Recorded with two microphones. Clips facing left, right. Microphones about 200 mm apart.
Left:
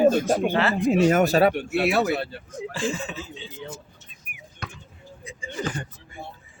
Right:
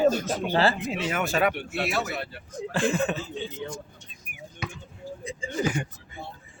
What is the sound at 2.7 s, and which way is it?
Speech, 60° right (ahead or behind).